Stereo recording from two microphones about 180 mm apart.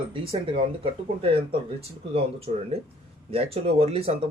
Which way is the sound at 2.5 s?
40° right (ahead or behind).